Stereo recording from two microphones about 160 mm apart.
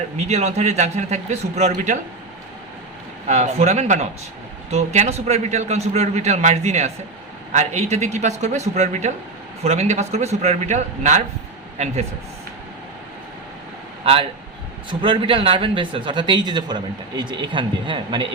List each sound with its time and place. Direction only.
0.2 s a man's voice: 45° right (ahead or behind)
3.2 s a man's voice: 45° right (ahead or behind)
14.0 s a man's voice: 35° right (ahead or behind)